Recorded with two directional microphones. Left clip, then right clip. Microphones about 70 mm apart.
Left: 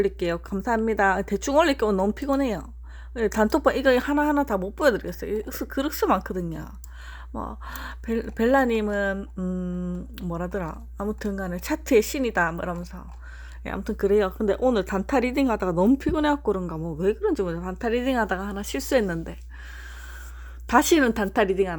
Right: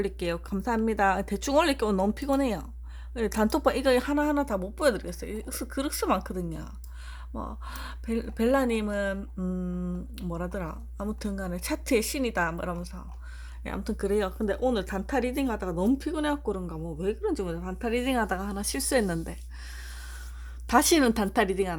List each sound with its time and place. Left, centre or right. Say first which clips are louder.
0.0 s a woman's voice: left 6 dB; left
9.4 s speech: left 3 dB; left
10.3 s a woman's voice: left 5 dB; left
11.0 s a woman's voice: left 5 dB; left
14.4 s speech: left 5 dB; left
16.0 s a woman's voice: left 6 dB; left
17.6 s a woman's voice: left 4 dB; left; by 19.4 s centre
20.7 s speech: left 3 dB; centre
21.0 s a woman's voice: left 3 dB; centre